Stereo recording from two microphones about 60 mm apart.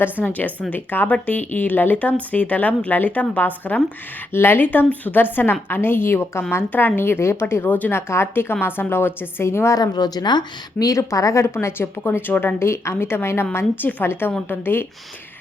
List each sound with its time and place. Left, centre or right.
0.0 s a woman's voice: left
4.3 s a woman's voice: left
10.9 s a woman's voice: left
12.3 s speech: left
12.5 s a woman's voice: left